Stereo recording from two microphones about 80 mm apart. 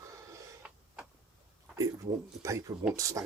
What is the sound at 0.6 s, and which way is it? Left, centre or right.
Printer, centre.